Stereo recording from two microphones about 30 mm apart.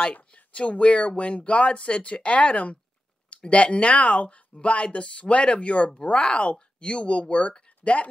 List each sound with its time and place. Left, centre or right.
0.0 s speech: left